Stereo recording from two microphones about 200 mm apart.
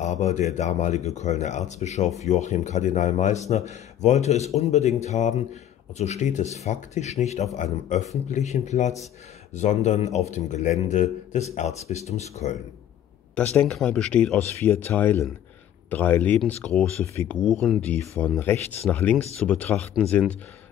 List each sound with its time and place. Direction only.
0.0 s a man's voice: 35° left (ahead or behind)
13.6 s speech: 5° left (ahead or behind)